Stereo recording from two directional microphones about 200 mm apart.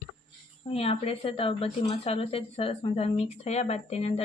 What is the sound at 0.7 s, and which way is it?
Speech, 30° left (ahead or behind).